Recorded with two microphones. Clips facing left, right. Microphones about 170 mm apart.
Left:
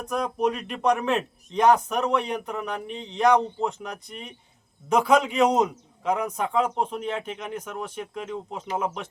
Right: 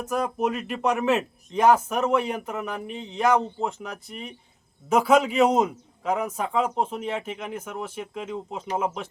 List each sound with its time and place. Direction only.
0.0 s speech: 5° right (ahead or behind)